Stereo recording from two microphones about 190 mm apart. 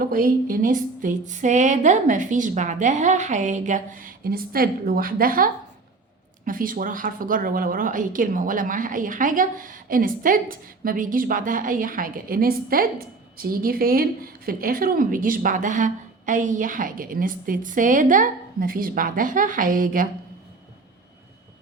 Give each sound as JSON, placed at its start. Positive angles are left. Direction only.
{"t": 0.0, "sound": "a woman's voice", "side_deg": -50}